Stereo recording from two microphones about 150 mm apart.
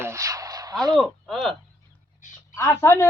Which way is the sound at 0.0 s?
20° right (ahead or behind).